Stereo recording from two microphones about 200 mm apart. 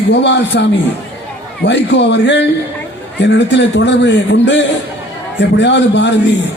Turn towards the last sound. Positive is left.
turn(degrees=60)  # may be behind; listen again after turning